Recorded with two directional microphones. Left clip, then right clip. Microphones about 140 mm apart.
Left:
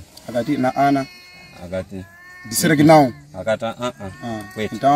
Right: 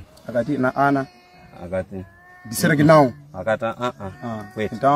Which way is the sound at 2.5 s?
Centre (ahead or behind).